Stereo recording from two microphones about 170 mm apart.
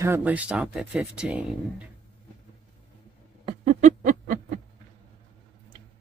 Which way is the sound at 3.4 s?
40° right (ahead or behind).